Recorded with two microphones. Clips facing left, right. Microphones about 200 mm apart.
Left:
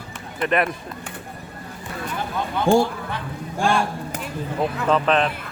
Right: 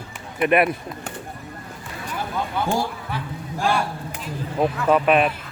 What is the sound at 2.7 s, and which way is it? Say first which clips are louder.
Speech: left 9 dB; 80° left.